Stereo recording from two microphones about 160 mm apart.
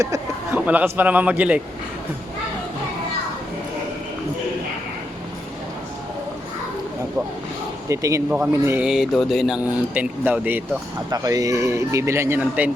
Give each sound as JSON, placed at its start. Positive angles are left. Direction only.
{"t": 0.0, "sound": "a sound", "side_deg": -20}
{"t": 0.6, "sound": "speech", "side_deg": -10}
{"t": 7.9, "sound": "speech", "side_deg": -20}
{"t": 11.1, "sound": "speech", "side_deg": -25}